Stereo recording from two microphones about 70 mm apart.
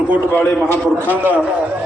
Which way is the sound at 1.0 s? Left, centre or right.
Right.